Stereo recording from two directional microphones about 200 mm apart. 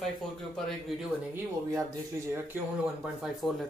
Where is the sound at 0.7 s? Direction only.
Centre (ahead or behind).